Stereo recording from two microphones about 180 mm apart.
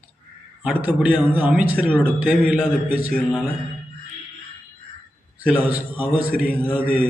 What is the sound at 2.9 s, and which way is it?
Speech, 50° left (ahead or behind).